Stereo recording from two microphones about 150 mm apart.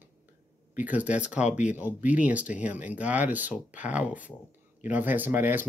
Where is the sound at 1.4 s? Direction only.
50° left (ahead or behind).